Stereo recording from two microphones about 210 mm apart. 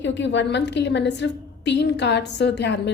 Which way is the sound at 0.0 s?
60° left (ahead or behind).